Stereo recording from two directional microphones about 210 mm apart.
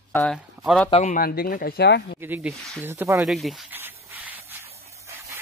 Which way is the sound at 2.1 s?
10° right (ahead or behind).